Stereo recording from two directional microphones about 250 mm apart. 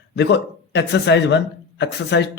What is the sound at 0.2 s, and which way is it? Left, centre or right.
A man's voice, left.